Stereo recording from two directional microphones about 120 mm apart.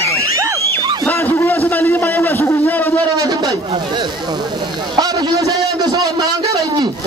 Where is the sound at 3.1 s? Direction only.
30° right (ahead or behind).